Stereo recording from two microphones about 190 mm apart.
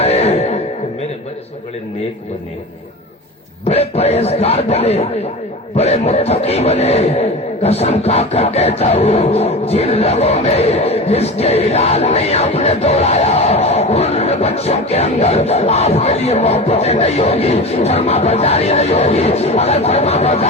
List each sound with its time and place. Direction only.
0.0 s music: 35° left (ahead or behind)
3.6 s a man's voice: 35° left (ahead or behind)